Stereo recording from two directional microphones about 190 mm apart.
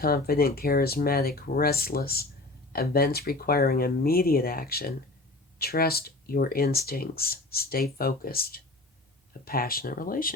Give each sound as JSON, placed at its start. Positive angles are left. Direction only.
{"t": 0.0, "sound": "speech", "side_deg": 50}